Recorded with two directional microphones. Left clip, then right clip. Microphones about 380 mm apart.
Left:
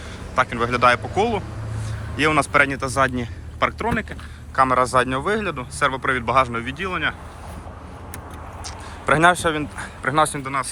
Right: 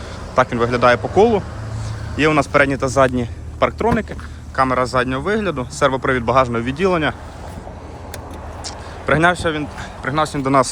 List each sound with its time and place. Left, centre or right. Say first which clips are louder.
0.3 s speech: right 4 dB; centre
8.6 s speech: right 1 dB; centre